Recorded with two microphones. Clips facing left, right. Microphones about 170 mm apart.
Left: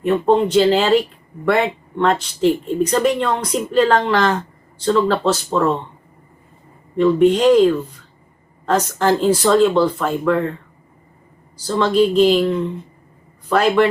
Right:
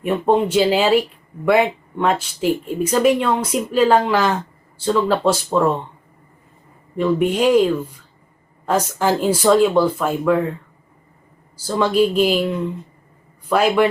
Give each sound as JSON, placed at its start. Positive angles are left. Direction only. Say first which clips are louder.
{"t": 0.0, "sound": "speech", "louder": "left 2 dB", "side_deg": -10}
{"t": 6.9, "sound": "speech", "louder": "left 5 dB", "side_deg": -10}
{"t": 11.5, "sound": "speech", "louder": "left 1 dB", "side_deg": -10}